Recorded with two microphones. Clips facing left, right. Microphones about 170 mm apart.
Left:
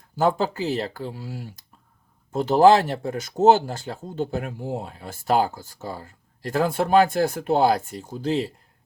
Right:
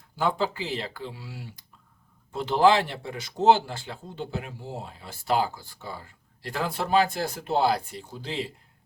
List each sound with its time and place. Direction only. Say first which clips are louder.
0.2 s speech: left 5 dB; 45° left (ahead or behind)